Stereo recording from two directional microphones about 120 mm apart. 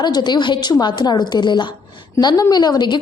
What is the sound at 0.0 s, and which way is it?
A woman's voice, 35° left (ahead or behind).